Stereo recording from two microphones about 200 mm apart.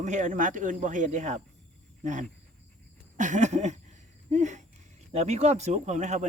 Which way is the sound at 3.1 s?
40° right (ahead or behind).